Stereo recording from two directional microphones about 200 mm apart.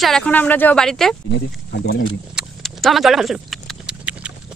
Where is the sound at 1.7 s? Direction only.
55° left (ahead or behind).